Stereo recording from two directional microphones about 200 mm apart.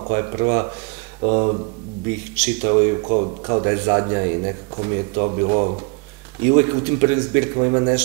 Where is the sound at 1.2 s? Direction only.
35° right (ahead or behind).